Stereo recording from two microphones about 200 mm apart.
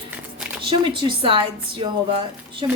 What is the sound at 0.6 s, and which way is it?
A woman's voice, 25° right (ahead or behind).